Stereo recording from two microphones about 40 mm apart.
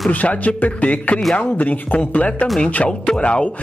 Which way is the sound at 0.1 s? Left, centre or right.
Left.